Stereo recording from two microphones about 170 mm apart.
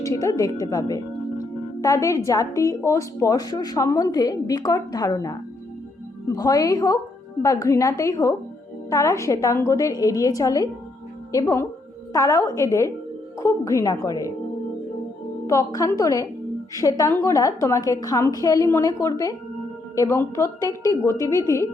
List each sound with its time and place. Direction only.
0.0 s a woman's voice: 20° left (ahead or behind)
15.4 s a woman's voice: 20° left (ahead or behind)